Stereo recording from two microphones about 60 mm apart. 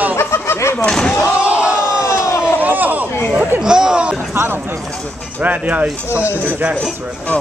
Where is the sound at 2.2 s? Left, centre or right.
Left.